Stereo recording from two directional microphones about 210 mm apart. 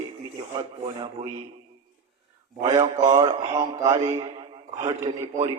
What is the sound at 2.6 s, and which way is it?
A man's voice, 20° right (ahead or behind).